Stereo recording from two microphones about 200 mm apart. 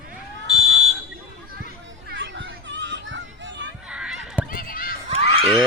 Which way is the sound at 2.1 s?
65° right (ahead or behind).